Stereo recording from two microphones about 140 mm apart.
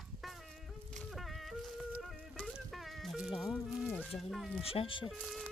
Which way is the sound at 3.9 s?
10° left (ahead or behind).